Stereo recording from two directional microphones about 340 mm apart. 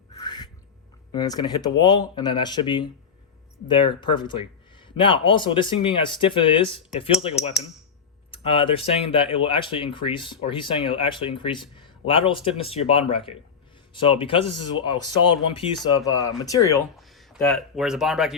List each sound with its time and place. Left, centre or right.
0.1 s a sound: centre
1.1 s speech: centre
15.5 s speech: centre